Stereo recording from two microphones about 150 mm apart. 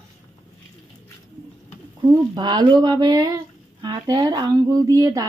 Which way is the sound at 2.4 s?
30° right (ahead or behind).